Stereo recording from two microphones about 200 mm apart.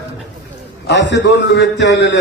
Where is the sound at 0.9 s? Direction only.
60° left (ahead or behind).